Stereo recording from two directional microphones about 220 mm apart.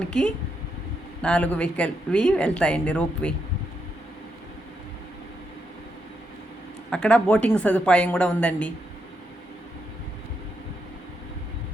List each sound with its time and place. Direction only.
0.0 s speech: 5° left (ahead or behind)
6.9 s speech: 5° left (ahead or behind)